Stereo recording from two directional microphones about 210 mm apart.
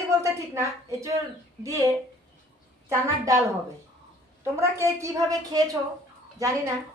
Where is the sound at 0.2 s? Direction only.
15° right (ahead or behind).